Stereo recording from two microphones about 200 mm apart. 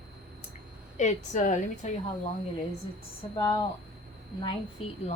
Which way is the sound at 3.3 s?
20° left (ahead or behind).